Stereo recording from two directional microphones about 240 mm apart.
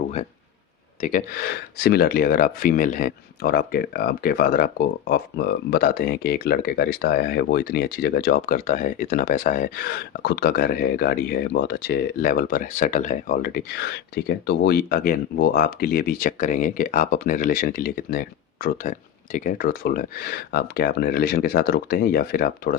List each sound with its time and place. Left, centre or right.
1.0 s speech: left